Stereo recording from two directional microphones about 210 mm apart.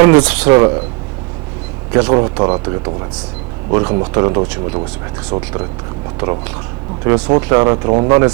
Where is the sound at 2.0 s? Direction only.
15° right (ahead or behind).